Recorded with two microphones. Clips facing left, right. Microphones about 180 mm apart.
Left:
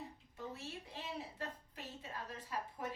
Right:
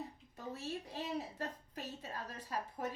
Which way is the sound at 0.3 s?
40° right (ahead or behind).